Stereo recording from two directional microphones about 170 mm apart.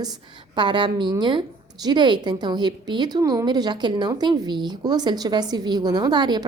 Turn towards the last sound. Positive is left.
turn(degrees=-25)  # may be behind; listen again after turning